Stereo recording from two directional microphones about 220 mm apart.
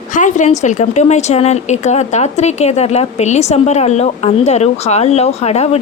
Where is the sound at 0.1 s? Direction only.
35° left (ahead or behind).